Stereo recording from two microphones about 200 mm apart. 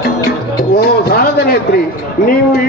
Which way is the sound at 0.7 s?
50° left (ahead or behind).